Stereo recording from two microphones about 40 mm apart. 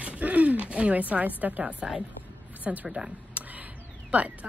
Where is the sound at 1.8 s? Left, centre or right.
Centre.